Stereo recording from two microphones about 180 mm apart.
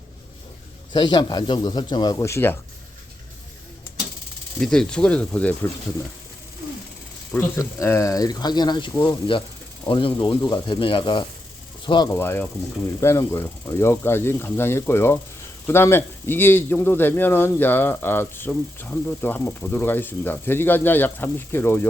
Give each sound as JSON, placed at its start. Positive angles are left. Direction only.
{"t": 0.9, "sound": "speech", "side_deg": 25}
{"t": 4.6, "sound": "speech", "side_deg": 5}
{"t": 7.3, "sound": "speech", "side_deg": 10}
{"t": 12.1, "sound": "speech", "side_deg": 10}